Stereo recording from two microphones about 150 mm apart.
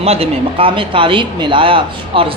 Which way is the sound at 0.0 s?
40° right (ahead or behind).